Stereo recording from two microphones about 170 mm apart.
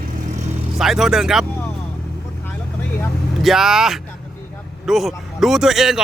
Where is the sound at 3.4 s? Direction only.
Centre (ahead or behind).